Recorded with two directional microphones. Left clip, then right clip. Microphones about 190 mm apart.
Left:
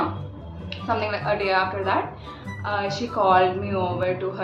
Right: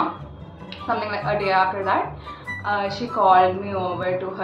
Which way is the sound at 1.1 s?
15° left (ahead or behind).